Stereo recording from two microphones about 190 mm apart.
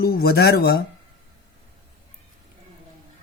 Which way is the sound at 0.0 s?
55° left (ahead or behind).